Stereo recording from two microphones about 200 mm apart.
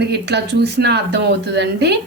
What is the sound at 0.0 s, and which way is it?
Speech, 55° right (ahead or behind).